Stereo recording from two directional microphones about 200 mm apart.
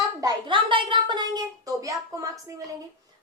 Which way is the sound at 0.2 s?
20° right (ahead or behind).